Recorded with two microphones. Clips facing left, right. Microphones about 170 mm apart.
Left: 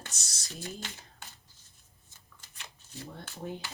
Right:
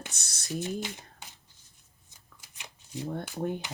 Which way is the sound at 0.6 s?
15° right (ahead or behind).